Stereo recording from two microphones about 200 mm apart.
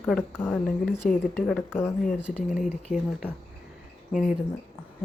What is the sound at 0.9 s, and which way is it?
Speech, 40° left (ahead or behind).